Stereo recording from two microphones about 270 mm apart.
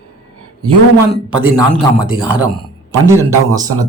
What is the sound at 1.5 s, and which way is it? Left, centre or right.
Speech, centre.